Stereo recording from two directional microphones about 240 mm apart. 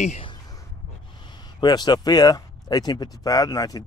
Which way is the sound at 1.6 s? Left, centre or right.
Centre.